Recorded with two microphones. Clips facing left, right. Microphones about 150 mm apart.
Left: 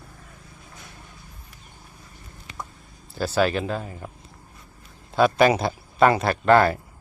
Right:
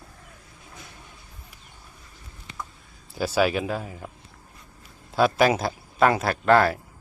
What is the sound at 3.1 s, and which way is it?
Speech, 10° right (ahead or behind).